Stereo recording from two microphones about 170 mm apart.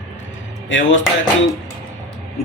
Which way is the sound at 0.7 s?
90° left.